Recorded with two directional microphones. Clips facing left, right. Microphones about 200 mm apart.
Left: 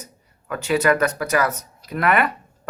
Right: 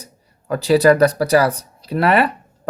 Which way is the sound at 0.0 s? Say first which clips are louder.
Even; 35° right (ahead or behind).